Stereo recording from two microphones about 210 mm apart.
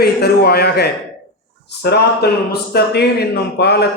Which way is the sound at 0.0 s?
50° left (ahead or behind).